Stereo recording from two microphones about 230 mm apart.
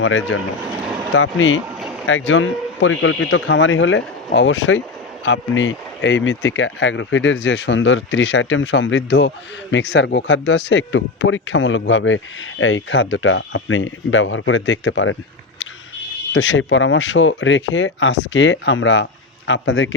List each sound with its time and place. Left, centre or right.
0.0 s speech: left
16.3 s speech: left